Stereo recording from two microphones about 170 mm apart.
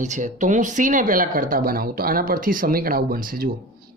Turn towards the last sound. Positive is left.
turn(degrees=-55)  # may be behind; listen again after turning